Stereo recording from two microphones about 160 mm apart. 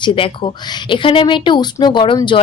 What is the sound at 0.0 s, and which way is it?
Speech, 30° left (ahead or behind).